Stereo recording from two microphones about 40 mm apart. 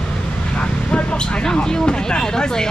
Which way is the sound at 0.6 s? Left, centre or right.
Left.